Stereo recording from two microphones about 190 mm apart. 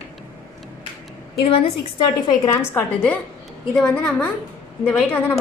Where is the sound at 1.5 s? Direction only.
25° left (ahead or behind).